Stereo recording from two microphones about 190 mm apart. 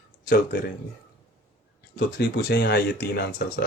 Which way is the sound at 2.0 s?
55° left (ahead or behind).